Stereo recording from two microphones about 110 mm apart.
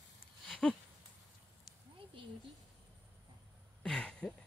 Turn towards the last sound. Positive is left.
turn(degrees=5)  # may be behind; listen again after turning